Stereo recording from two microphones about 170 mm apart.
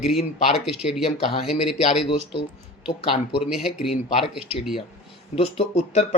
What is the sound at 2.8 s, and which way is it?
Speech, 30° left (ahead or behind).